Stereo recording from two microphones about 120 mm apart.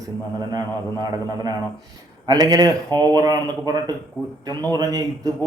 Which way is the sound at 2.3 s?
30° right (ahead or behind).